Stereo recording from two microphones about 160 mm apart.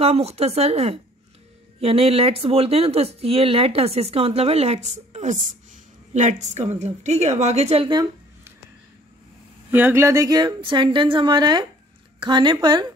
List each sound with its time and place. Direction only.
0.0 s a woman's voice: 40° right (ahead or behind)
9.7 s speech: 10° right (ahead or behind); by 12.5 s 30° right (ahead or behind)